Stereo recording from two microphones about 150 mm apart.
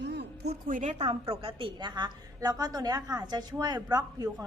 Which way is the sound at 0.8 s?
50° right (ahead or behind).